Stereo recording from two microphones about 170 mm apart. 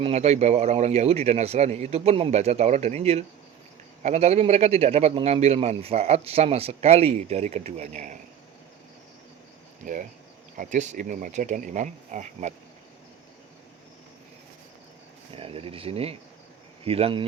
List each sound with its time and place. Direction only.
0.0 s a man's voice: 40° right (ahead or behind)
10.6 s speech: 45° right (ahead or behind)
15.4 s a man's voice: 35° right (ahead or behind)